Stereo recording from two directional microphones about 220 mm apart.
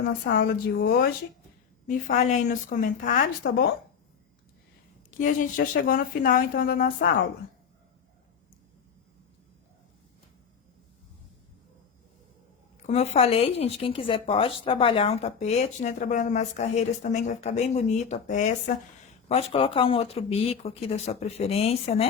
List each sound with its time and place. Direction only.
0.0 s a woman's voice: 45° left (ahead or behind)
1.9 s speech: 35° left (ahead or behind)
5.2 s speech: 40° left (ahead or behind)
12.9 s speech: 30° left (ahead or behind)